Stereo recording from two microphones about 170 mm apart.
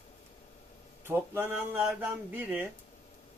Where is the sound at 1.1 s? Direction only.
10° right (ahead or behind).